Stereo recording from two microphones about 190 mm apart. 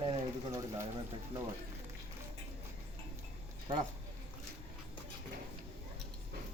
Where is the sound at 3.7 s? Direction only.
25° right (ahead or behind).